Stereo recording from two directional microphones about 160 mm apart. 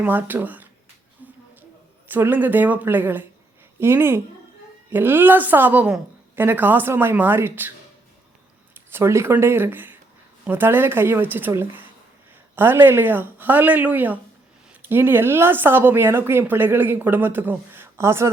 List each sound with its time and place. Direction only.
0.0 s speech: 10° right (ahead or behind)
1.2 s a sound: 10° right (ahead or behind)
2.0 s speech: 10° right (ahead or behind)
8.7 s speech: 15° right (ahead or behind)